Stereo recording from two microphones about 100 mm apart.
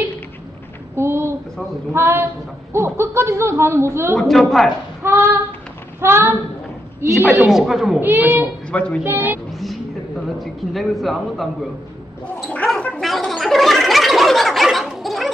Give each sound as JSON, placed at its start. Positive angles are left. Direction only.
{"t": 0.9, "sound": "a sound", "side_deg": -25}
{"t": 1.9, "sound": "a child's voice", "side_deg": -25}
{"t": 4.2, "sound": "speech", "side_deg": 0}
{"t": 5.0, "sound": "child singing", "side_deg": -20}
{"t": 5.9, "sound": "a sound", "side_deg": -25}
{"t": 7.0, "sound": "a woman's voice", "side_deg": -25}
{"t": 7.4, "sound": "speech", "side_deg": -5}
{"t": 8.0, "sound": "a child's voice", "side_deg": -20}
{"t": 8.6, "sound": "a woman's voice", "side_deg": 10}
{"t": 9.0, "sound": "a child's voice", "side_deg": -20}
{"t": 9.5, "sound": "vehicle", "side_deg": 0}
{"t": 10.4, "sound": "speech", "side_deg": 0}
{"t": 12.6, "sound": "gargling", "side_deg": 10}
{"t": 13.0, "sound": "gargling", "side_deg": 0}